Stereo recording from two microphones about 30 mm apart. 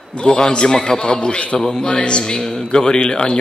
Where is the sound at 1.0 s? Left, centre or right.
Left.